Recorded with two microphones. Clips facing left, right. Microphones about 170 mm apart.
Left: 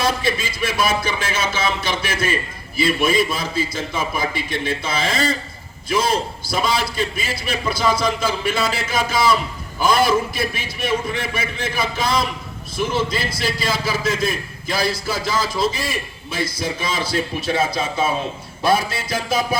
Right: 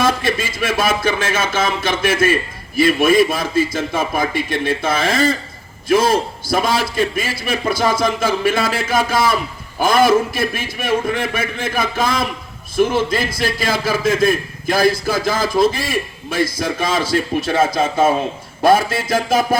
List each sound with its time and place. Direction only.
0.0 s a man's voice: 50° right (ahead or behind)